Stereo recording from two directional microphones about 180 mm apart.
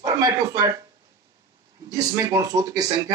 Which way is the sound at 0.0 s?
20° right (ahead or behind).